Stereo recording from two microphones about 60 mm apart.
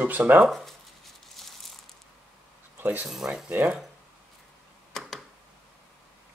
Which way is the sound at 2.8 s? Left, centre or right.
Right.